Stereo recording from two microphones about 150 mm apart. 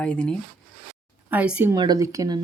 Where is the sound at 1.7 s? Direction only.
25° right (ahead or behind).